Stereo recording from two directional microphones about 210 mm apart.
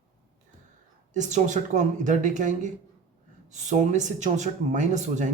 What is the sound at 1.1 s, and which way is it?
Speech, 35° right (ahead or behind).